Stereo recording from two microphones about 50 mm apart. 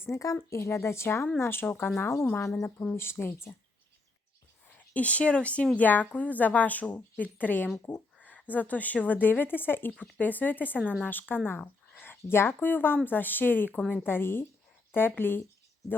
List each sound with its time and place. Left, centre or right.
0.0 s speech: left
0.5 s a woman's voice: left
2.3 s speech: left
2.9 s speech: left
4.7 s speech: left